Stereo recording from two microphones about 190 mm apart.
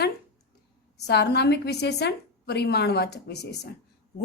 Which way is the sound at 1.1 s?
60° left (ahead or behind).